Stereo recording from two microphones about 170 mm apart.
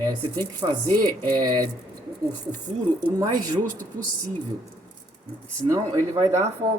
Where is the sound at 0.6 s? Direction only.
25° right (ahead or behind).